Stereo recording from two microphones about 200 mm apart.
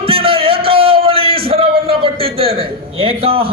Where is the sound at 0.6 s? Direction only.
25° right (ahead or behind).